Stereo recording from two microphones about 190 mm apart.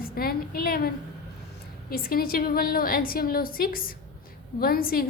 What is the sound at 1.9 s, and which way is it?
A woman's voice, 50° left (ahead or behind).